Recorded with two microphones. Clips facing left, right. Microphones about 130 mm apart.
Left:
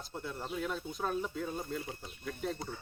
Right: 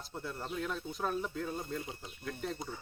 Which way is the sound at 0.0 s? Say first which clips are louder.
Even; centre (ahead or behind).